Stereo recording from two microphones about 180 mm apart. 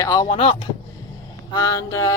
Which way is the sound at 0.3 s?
30° left (ahead or behind).